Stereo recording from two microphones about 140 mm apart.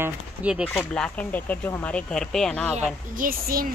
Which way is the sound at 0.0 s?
10° right (ahead or behind).